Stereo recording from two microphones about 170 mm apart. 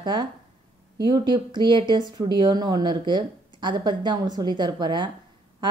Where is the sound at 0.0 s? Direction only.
25° right (ahead or behind).